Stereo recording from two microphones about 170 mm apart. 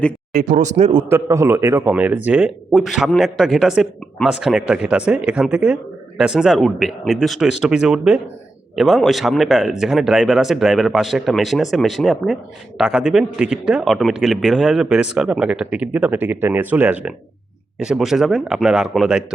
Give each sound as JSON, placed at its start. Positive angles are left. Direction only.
{"t": 0.3, "sound": "speech", "side_deg": -45}
{"t": 1.1, "sound": "speech", "side_deg": -15}